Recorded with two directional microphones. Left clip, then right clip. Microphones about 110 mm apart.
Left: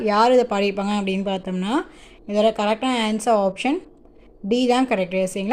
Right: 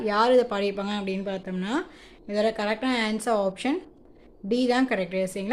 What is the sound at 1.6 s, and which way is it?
Speech, 30° left (ahead or behind).